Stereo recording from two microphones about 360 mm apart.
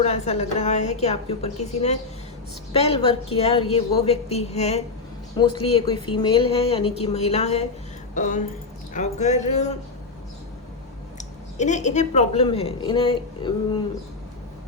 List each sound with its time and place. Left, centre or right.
0.0 s a woman's voice: centre
11.2 s a woman's voice: centre